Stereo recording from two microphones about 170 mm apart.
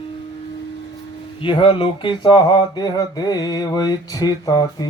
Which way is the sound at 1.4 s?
30° left (ahead or behind).